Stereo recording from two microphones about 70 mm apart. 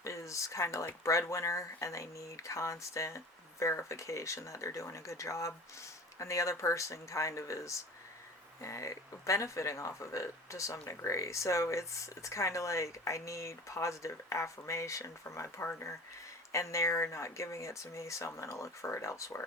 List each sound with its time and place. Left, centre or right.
0.0 s speech: left